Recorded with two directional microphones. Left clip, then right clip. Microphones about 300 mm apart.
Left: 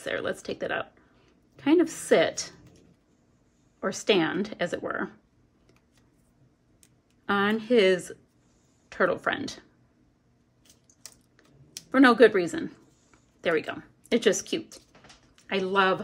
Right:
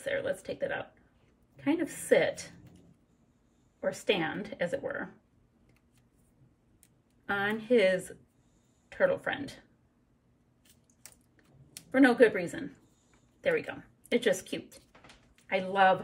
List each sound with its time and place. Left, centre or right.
0.0 s speech: centre
3.8 s speech: centre
7.2 s speech: centre
11.9 s speech: centre